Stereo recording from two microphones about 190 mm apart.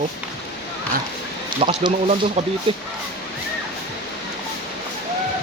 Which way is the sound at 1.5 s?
25° right (ahead or behind).